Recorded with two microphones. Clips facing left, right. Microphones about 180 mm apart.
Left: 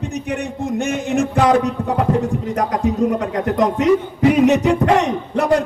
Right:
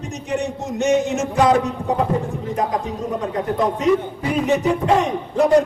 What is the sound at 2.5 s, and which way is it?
A man's voice, 80° left.